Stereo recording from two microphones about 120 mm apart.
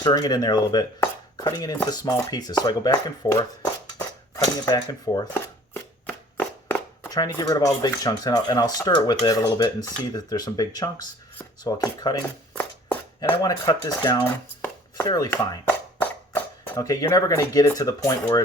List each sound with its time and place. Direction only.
0.0 s speech: 35° left (ahead or behind)
0.9 s speech: 25° left (ahead or behind)
4.6 s speech: 35° left (ahead or behind)
6.1 s a sound: 5° left (ahead or behind)
7.1 s speech: 35° left (ahead or behind)
13.4 s speech: 30° left (ahead or behind)
14.2 s chopping: 15° left (ahead or behind)
15.0 s speech: 30° left (ahead or behind)
15.3 s a sound: 15° left (ahead or behind)
16.7 s speech: 30° left (ahead or behind)